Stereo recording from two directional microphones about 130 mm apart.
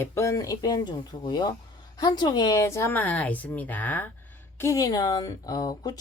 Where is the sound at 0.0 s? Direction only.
20° left (ahead or behind).